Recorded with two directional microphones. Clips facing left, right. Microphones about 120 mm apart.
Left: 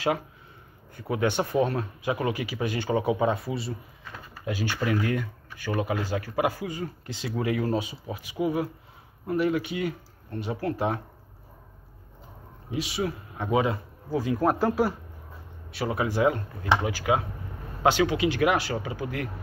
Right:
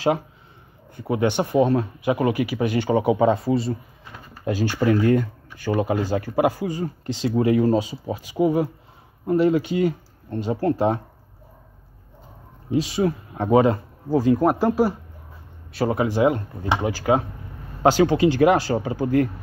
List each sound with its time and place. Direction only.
0.9 s speech: 25° right (ahead or behind)
12.7 s speech: 40° right (ahead or behind)
14.4 s speech: 10° right (ahead or behind)
16.2 s speech: 20° right (ahead or behind)